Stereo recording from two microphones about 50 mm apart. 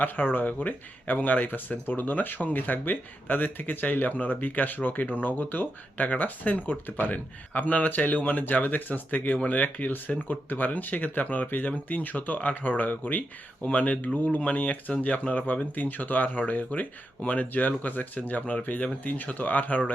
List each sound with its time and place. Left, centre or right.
0.0 s speech: left